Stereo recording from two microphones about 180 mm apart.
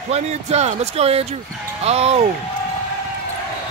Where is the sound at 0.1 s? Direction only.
35° right (ahead or behind).